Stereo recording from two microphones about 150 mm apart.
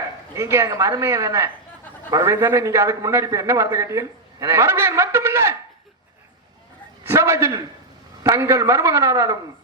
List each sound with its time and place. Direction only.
0.3 s a man's voice: 20° right (ahead or behind)
7.1 s a man's voice: 15° right (ahead or behind)